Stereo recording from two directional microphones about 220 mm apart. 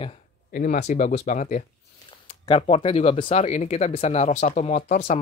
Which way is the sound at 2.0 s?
20° left (ahead or behind).